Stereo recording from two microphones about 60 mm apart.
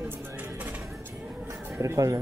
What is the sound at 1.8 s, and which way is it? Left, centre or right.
Speech, right.